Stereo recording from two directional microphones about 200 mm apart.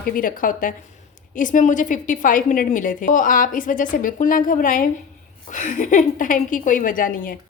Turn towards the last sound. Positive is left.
turn(degrees=45)  # may be behind; listen again after turning